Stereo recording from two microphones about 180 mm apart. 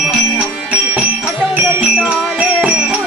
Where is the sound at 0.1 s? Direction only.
5° right (ahead or behind).